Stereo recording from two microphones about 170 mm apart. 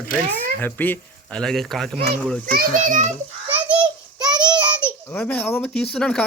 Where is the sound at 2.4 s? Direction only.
60° right (ahead or behind).